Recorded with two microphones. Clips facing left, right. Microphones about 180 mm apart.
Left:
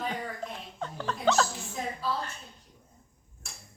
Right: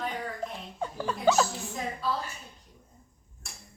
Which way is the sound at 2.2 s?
10° right (ahead or behind).